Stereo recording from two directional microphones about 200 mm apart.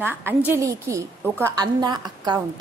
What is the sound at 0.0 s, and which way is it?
A woman's voice, 10° right (ahead or behind).